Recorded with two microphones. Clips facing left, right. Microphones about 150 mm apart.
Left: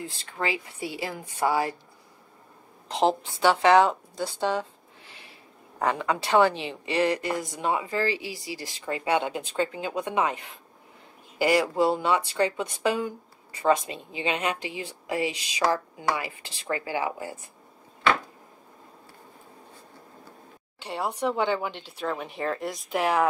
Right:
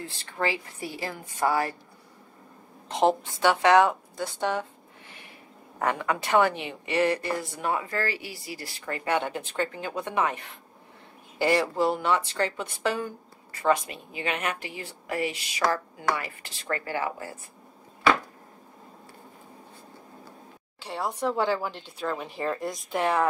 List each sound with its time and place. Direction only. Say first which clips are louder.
0.0 s speech: right 1 dB; 15° left (ahead or behind)
2.9 s a woman's voice: right 1 dB; 25° left (ahead or behind)
3.3 s speech: left 2 dB; 10° left (ahead or behind)
5.8 s speech: left 1 dB; 15° left (ahead or behind)
20.8 s a woman's voice: left 1 dB; centre (ahead or behind)